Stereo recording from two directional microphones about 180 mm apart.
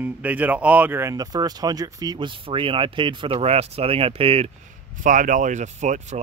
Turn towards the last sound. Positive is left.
turn(degrees=-40)  # may be behind; listen again after turning